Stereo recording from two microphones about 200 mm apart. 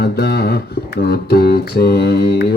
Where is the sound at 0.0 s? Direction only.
55° left (ahead or behind).